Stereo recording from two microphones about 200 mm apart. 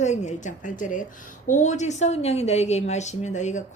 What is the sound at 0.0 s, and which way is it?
A woman's voice, 35° left (ahead or behind).